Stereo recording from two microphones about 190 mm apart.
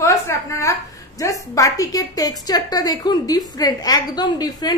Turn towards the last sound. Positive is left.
turn(degrees=20)  # may be behind; listen again after turning